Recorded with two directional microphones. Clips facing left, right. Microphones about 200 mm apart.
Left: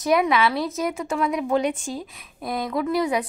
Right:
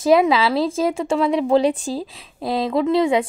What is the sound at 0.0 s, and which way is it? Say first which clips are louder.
A woman's voice: right 5 dB; 25° right (ahead or behind).